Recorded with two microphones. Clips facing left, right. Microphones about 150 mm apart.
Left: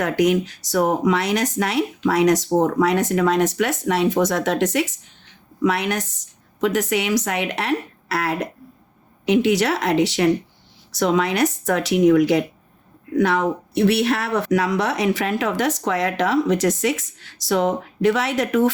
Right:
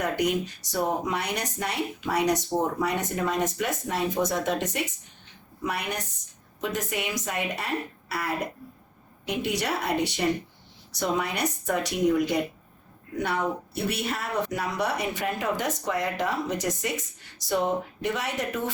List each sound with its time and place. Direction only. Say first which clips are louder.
0.0 s speech: left 7 dB; 90° left